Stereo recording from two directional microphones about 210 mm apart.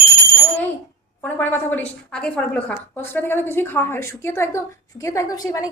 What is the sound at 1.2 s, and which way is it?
A woman's voice, 10° left (ahead or behind).